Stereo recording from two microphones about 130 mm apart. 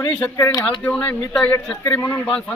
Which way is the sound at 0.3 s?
20° left (ahead or behind).